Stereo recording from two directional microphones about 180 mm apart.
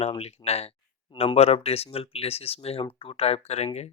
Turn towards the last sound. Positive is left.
turn(degrees=35)  # may be behind; listen again after turning